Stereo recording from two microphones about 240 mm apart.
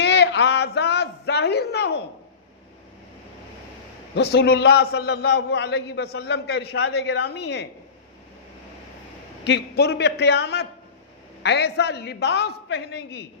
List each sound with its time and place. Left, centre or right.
0.0 s a sound: left
4.1 s a man's voice: left
9.4 s a man's voice: left